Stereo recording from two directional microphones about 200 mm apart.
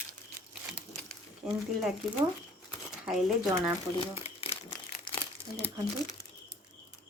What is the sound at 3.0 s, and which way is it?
Speech, centre (ahead or behind).